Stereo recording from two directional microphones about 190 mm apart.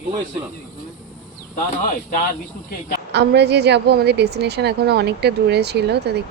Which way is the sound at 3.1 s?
60° right (ahead or behind).